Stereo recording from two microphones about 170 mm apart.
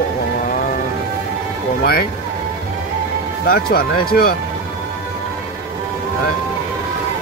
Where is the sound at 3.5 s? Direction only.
65° left (ahead or behind).